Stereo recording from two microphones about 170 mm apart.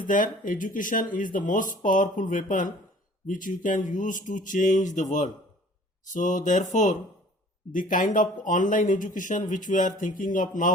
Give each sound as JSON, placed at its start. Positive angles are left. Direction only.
{"t": 0.0, "sound": "speech", "side_deg": 50}
{"t": 6.1, "sound": "speech", "side_deg": 50}